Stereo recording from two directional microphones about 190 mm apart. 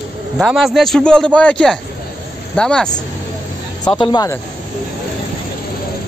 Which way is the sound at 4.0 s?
20° left (ahead or behind).